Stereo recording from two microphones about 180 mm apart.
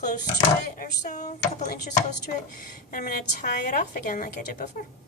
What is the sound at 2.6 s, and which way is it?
A woman's voice, 55° left (ahead or behind).